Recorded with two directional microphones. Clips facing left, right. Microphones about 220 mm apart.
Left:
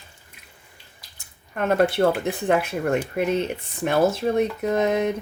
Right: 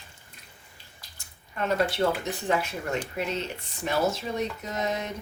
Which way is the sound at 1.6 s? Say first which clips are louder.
Left 6 dB; 55° left (ahead or behind).